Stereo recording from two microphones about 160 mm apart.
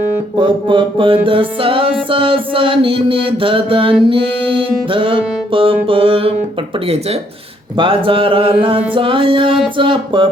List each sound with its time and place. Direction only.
0.3 s music: 30° right (ahead or behind)